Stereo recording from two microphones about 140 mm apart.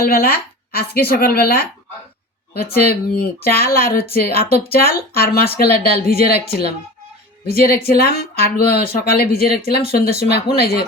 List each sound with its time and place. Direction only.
0.0 s speech: 90° left
7.4 s speech: 90° left